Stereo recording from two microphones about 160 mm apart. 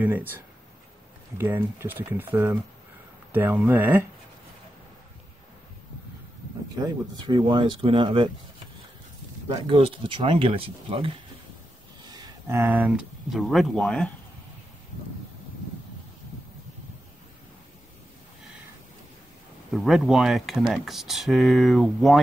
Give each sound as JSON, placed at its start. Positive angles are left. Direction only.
{"t": 0.0, "sound": "speech", "side_deg": -10}
{"t": 1.4, "sound": "speech", "side_deg": -15}
{"t": 6.7, "sound": "speech", "side_deg": -25}
{"t": 9.5, "sound": "speech", "side_deg": -35}
{"t": 19.7, "sound": "speech", "side_deg": 0}